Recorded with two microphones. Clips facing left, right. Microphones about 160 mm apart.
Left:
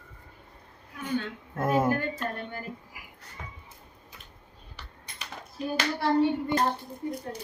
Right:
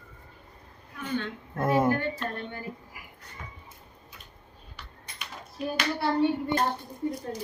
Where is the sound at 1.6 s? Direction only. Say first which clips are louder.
Right 1 dB; 5° left (ahead or behind).